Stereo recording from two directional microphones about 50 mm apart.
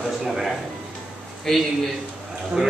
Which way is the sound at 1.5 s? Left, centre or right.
Centre.